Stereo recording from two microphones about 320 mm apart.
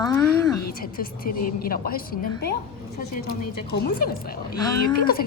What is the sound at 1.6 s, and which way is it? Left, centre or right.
A woman's voice, left.